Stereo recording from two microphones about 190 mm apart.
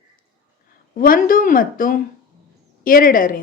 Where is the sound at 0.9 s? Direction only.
50° left (ahead or behind).